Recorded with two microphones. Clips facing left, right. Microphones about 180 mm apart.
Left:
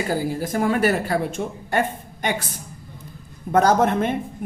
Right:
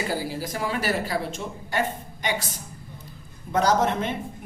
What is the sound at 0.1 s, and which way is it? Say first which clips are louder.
A woman's voice: left 5 dB; 50° left (ahead or behind).